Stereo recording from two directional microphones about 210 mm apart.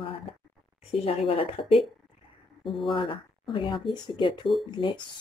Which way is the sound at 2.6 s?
Centre (ahead or behind).